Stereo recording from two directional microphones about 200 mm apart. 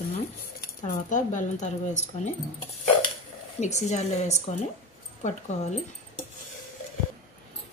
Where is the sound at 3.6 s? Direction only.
35° left (ahead or behind).